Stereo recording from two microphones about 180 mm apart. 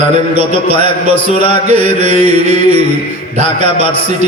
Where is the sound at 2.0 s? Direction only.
40° right (ahead or behind).